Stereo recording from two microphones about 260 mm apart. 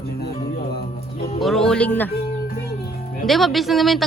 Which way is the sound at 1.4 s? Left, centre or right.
Centre.